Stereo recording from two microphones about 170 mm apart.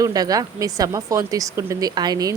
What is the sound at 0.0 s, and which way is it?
A woman's voice, 20° right (ahead or behind).